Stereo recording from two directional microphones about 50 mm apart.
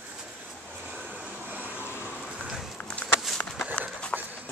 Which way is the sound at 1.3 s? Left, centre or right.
Right.